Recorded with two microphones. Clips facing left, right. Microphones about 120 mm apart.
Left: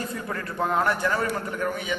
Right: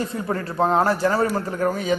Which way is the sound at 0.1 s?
30° right (ahead or behind).